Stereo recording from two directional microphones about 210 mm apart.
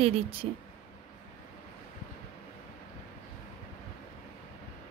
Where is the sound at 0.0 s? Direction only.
25° right (ahead or behind).